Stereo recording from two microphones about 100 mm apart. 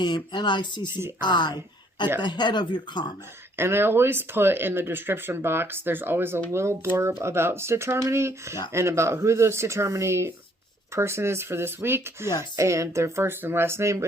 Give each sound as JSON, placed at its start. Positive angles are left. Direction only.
{"t": 0.0, "sound": "speech", "side_deg": 50}
{"t": 3.6, "sound": "speech", "side_deg": -25}